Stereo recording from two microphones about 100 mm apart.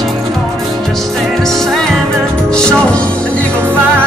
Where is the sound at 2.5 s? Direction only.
10° left (ahead or behind).